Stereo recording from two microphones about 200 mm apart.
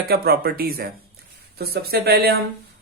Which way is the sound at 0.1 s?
50° right (ahead or behind).